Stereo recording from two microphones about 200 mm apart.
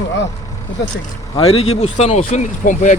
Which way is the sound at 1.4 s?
30° left (ahead or behind).